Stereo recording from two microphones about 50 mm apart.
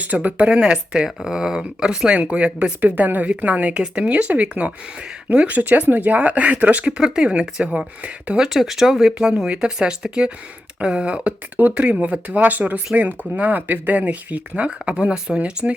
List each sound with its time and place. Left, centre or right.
0.0 s speech: right
8.4 s speech: centre